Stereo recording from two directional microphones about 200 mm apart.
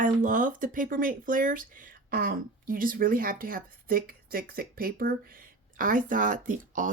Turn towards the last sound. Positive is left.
turn(degrees=-40)  # may be behind; listen again after turning